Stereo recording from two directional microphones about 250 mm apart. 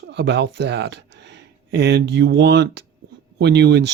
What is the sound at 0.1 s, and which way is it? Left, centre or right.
Speech, right.